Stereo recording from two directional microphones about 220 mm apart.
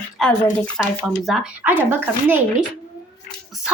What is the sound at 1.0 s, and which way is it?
A child's voice, centre (ahead or behind).